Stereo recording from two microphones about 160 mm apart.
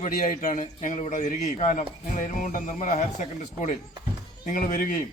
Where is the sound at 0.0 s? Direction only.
50° left (ahead or behind).